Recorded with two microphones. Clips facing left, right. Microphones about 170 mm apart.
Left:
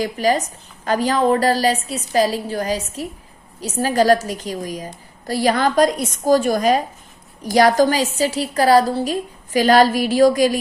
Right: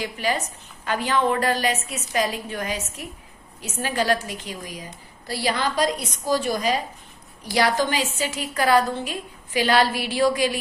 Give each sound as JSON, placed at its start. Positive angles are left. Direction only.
{"t": 0.0, "sound": "a woman's voice", "side_deg": 40}